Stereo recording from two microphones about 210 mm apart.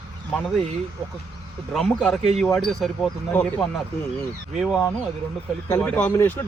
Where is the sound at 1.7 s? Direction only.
Centre (ahead or behind).